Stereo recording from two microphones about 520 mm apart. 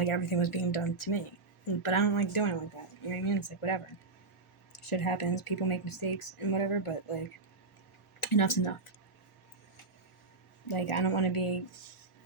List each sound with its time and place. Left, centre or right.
0.0 s speech: left
4.9 s speech: left
8.2 s speech: left
10.7 s speech: left